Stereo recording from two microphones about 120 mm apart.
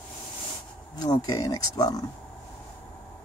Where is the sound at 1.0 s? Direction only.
35° left (ahead or behind).